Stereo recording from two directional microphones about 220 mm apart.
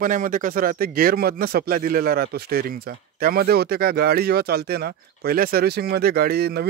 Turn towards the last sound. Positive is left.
turn(degrees=-45)  # may be behind; listen again after turning